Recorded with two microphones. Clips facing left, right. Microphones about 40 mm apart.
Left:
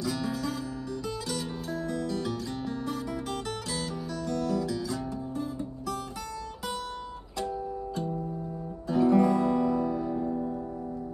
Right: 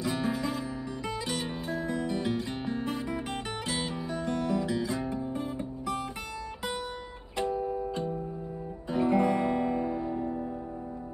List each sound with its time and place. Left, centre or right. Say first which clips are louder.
0.0 s music: right 1 dB; right
4.3 s music: even; right
7.3 s music: right 3 dB; right
8.8 s guitar: left 3 dB; right